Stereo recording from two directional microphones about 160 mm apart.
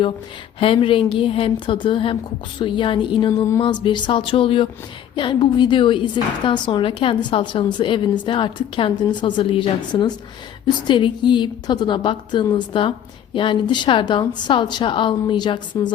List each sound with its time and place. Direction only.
0.6 s a woman's voice: 35° left (ahead or behind)